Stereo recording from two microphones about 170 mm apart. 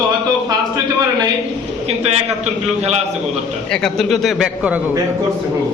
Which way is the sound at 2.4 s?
40° right (ahead or behind).